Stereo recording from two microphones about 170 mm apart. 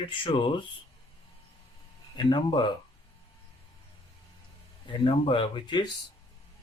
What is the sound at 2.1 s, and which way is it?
Speech, 30° left (ahead or behind).